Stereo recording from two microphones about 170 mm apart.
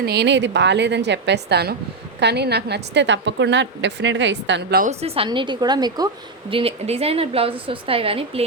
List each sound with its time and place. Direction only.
0.0 s a woman's voice: 80° right
4.8 s a woman's voice: 40° right (ahead or behind)